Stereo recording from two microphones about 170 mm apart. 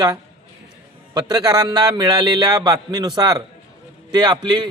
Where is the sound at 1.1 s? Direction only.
25° right (ahead or behind).